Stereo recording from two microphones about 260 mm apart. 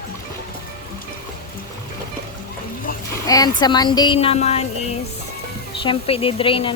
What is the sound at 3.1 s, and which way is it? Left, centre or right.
A woman's voice, centre.